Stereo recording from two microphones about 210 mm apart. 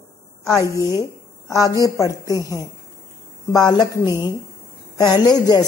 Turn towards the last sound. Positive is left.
turn(degrees=20)  # may be behind; listen again after turning